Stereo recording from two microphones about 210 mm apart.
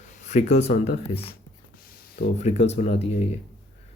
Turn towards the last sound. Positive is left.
turn(degrees=30)  # may be behind; listen again after turning